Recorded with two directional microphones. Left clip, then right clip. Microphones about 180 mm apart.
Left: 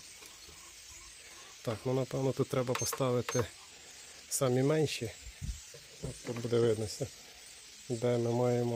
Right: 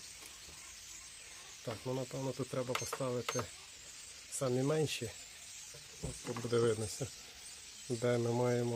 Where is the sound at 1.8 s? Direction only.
50° left (ahead or behind).